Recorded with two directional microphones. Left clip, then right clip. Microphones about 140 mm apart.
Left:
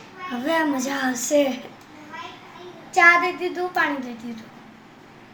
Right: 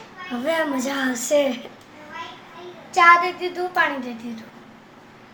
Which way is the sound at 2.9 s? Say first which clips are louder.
Right 1 dB; 15° left (ahead or behind).